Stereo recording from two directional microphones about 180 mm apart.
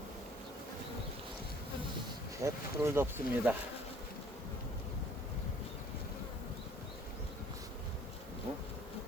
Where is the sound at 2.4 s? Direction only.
15° right (ahead or behind).